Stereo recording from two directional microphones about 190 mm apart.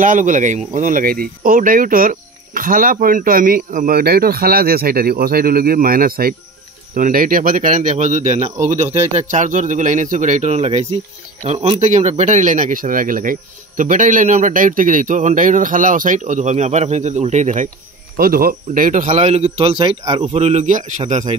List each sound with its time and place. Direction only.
0.0 s speech: 45° right (ahead or behind)
18.1 s speech: 50° right (ahead or behind)